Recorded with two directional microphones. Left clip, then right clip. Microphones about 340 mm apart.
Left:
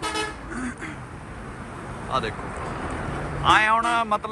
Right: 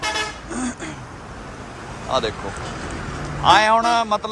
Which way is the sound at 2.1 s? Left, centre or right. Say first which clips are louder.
Right 5 dB; centre.